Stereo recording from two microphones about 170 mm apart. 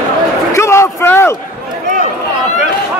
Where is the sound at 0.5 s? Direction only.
15° left (ahead or behind).